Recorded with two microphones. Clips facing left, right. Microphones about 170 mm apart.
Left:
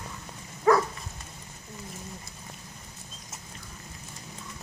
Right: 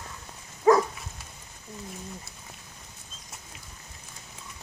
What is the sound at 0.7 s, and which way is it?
Dog, 20° right (ahead or behind).